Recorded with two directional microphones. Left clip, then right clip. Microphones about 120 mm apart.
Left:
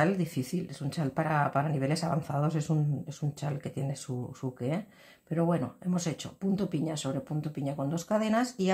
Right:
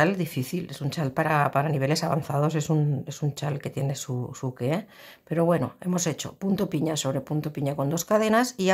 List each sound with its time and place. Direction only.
0.0 s speech: 20° right (ahead or behind)